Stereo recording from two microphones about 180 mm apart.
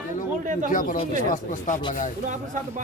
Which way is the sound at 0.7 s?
50° left (ahead or behind).